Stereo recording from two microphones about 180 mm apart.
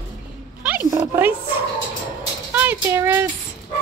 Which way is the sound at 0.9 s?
15° right (ahead or behind).